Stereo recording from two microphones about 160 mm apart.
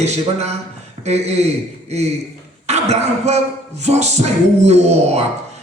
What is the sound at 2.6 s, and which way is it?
Speech, 45° right (ahead or behind).